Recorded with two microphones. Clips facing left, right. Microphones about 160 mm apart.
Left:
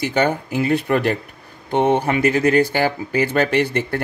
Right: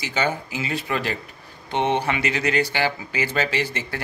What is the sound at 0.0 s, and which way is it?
Speech, 55° left (ahead or behind).